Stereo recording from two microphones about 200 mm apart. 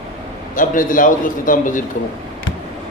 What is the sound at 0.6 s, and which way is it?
A man's voice, 40° left (ahead or behind).